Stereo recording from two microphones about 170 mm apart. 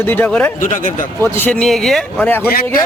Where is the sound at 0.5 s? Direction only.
50° left (ahead or behind).